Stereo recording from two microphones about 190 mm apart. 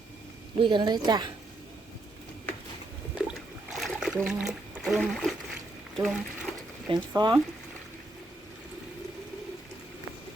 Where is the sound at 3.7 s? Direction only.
Centre (ahead or behind).